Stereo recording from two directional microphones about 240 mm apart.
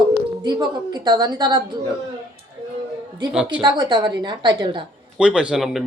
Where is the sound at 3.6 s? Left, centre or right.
Centre.